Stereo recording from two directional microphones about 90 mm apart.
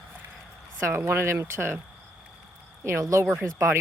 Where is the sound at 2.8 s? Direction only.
30° right (ahead or behind).